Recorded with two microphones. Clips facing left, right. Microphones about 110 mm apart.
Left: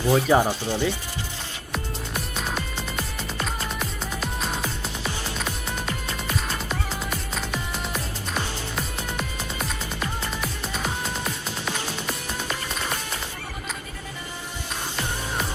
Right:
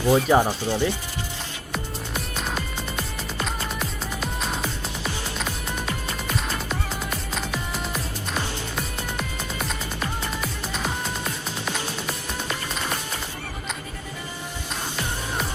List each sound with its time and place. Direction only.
0.0 s speech: 15° right (ahead or behind)
1.7 s music: centre (ahead or behind)